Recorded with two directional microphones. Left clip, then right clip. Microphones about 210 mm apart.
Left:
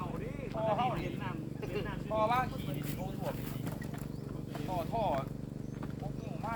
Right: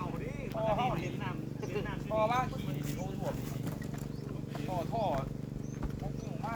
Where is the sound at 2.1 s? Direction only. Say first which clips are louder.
Even; 5° right (ahead or behind).